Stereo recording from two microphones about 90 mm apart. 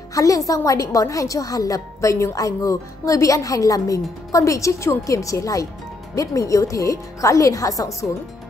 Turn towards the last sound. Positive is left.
turn(degrees=40)  # may be behind; listen again after turning